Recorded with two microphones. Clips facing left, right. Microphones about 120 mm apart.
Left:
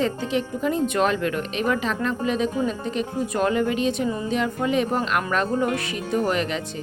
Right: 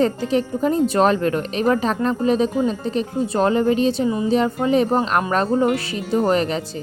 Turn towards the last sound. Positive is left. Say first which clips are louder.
# right 5 dB
turn(degrees=-35)  # may be behind; listen again after turning